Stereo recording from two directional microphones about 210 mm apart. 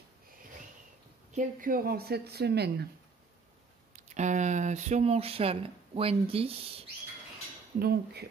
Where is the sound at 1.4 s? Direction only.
40° right (ahead or behind).